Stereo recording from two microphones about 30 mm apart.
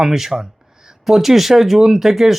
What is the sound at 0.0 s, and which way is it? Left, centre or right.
Speech, centre.